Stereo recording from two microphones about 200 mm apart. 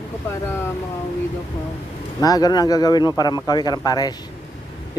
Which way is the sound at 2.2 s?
20° left (ahead or behind).